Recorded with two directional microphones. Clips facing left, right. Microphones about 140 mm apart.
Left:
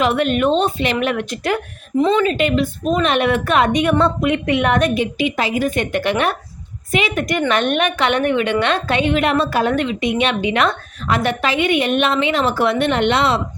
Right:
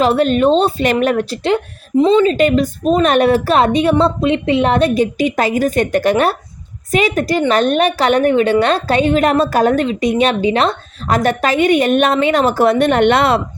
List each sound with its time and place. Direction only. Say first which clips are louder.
0.0 s a woman's voice: right 4 dB; 35° right (ahead or behind)
2.3 s a woman's voice: right 4 dB; 40° right (ahead or behind)
5.1 s a woman's voice: right 4 dB; 45° right (ahead or behind)